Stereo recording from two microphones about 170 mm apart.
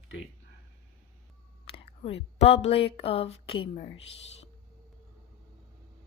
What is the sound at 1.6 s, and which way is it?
Speech, 35° left (ahead or behind).